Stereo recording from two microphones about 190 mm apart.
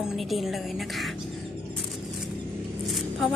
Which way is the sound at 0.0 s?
Centre (ahead or behind).